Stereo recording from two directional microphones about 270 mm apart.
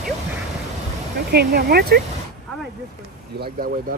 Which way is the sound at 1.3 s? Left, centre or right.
Right.